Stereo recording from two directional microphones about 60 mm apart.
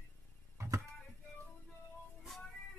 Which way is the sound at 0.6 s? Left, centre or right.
Right.